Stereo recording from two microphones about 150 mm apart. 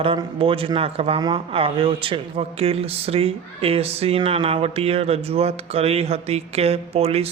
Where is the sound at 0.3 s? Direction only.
35° right (ahead or behind).